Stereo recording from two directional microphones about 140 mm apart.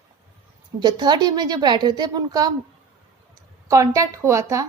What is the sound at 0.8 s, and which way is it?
A woman's voice, 30° right (ahead or behind).